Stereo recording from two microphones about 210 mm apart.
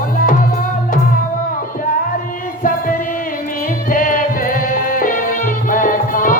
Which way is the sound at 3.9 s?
40° left (ahead or behind).